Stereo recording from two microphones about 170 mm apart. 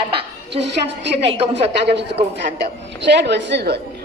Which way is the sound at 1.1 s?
35° right (ahead or behind).